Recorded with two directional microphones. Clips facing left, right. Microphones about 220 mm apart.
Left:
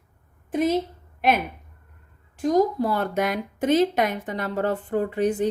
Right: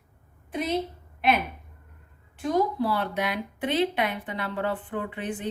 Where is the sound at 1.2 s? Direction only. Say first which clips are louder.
Left 2 dB; 45° left (ahead or behind).